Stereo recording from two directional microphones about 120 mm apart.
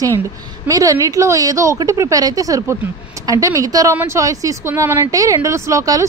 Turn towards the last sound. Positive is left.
turn(degrees=-25)  # may be behind; listen again after turning